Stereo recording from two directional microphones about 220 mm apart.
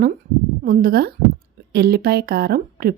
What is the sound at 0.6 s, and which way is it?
Speech, 40° right (ahead or behind).